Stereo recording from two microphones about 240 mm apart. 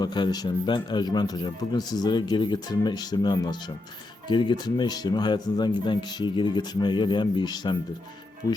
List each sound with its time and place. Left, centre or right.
0.0 s speech: centre